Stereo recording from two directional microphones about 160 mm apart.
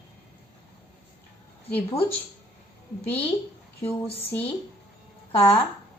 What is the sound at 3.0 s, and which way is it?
Speech, 10° left (ahead or behind).